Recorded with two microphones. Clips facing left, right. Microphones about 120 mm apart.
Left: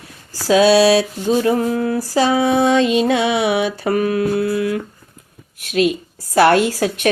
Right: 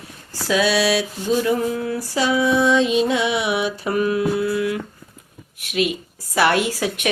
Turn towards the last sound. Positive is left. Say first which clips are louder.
# left 5 dB
turn(degrees=45)  # may be behind; listen again after turning